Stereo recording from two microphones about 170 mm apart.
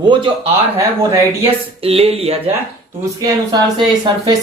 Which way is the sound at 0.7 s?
20° right (ahead or behind).